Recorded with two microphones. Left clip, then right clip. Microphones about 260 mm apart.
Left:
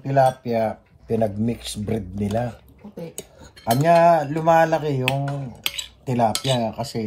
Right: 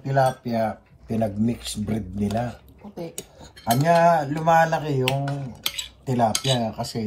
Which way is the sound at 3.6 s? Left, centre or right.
Left.